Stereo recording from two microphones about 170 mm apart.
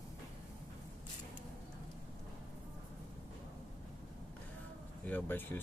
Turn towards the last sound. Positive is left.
turn(degrees=10)  # may be behind; listen again after turning